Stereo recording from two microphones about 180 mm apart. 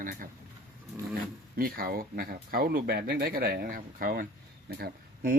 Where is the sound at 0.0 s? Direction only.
50° right (ahead or behind).